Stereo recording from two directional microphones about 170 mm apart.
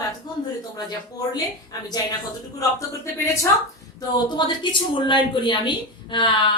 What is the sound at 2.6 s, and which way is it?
Speech, 20° left (ahead or behind).